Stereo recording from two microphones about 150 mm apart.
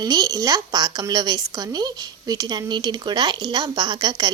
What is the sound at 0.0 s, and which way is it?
A woman's voice, 25° right (ahead or behind).